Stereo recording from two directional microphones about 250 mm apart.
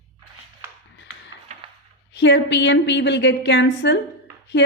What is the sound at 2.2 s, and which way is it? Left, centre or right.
A woman's voice, left.